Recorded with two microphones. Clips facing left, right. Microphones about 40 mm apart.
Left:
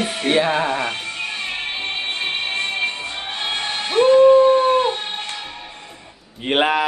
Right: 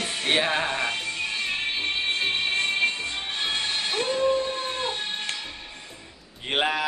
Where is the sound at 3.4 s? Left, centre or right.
Left.